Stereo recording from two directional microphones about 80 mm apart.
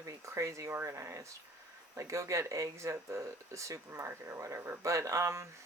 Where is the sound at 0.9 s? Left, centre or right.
Right.